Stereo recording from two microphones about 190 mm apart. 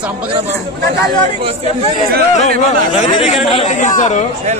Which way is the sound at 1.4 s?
30° right (ahead or behind).